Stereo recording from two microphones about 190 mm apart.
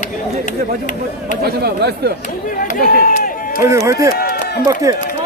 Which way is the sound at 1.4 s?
55° right (ahead or behind).